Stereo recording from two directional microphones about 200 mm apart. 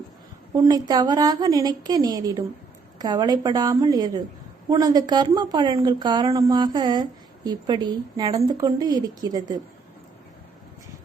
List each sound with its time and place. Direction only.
0.5 s a woman's voice: 20° right (ahead or behind)